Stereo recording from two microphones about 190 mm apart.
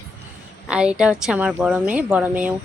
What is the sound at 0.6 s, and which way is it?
Speech, 5° right (ahead or behind).